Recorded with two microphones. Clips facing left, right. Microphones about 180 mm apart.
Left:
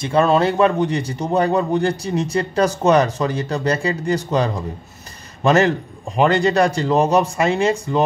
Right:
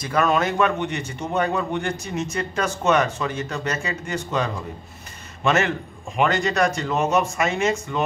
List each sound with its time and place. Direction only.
0.0 s a man's voice: 30° left (ahead or behind)